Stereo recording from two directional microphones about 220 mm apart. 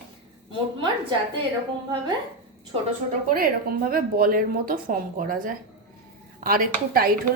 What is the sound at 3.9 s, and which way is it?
Speech, 40° right (ahead or behind).